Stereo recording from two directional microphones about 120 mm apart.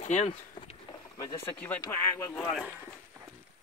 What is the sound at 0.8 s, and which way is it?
Vehicle, 40° left (ahead or behind).